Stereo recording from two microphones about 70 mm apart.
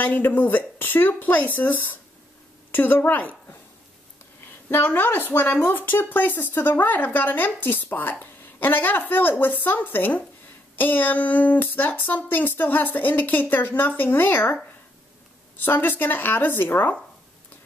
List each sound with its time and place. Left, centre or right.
0.0 s speech: left
4.6 s speech: left
15.6 s speech: left